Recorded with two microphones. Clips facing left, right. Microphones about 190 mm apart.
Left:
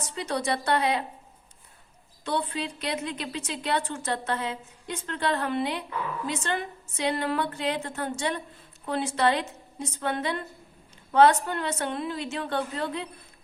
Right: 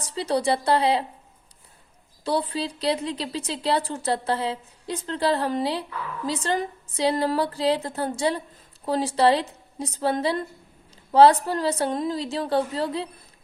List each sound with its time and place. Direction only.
0.0 s a woman's voice: 35° right (ahead or behind)
2.2 s a woman's voice: 35° right (ahead or behind)